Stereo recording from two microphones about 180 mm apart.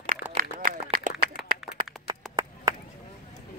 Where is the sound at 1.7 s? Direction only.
25° right (ahead or behind).